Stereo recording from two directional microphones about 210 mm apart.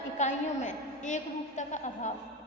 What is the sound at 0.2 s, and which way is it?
A woman's voice, 35° left (ahead or behind).